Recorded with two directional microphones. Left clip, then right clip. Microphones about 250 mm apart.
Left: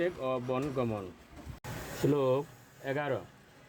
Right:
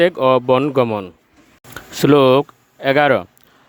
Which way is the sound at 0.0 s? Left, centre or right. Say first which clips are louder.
Right 19 dB; right.